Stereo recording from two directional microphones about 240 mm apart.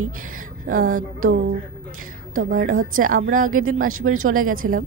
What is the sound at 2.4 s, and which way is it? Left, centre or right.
A woman's voice, right.